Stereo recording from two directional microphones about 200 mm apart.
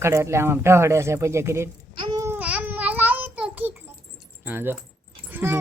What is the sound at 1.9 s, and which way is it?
Babbling, 25° right (ahead or behind).